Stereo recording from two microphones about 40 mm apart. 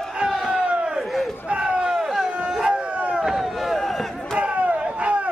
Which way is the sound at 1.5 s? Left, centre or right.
Right.